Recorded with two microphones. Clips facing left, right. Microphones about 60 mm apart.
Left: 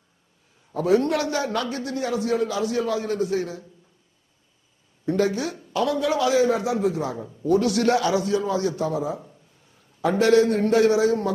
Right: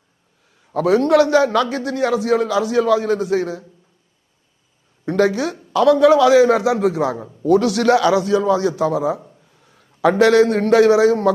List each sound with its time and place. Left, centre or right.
0.7 s a man's voice: right
5.0 s a man's voice: right